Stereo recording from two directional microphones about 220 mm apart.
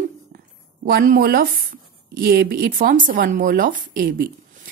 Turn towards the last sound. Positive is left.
turn(degrees=-40)  # may be behind; listen again after turning